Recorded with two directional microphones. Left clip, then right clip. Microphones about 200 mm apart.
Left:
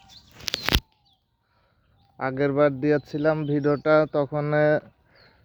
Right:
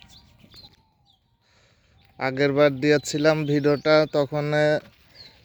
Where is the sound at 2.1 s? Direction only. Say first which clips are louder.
Right 2 dB; 5° right (ahead or behind).